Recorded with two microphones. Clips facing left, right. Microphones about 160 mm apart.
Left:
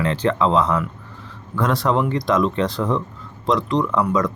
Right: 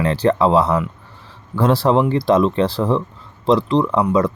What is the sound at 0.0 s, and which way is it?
Speech, 35° right (ahead or behind).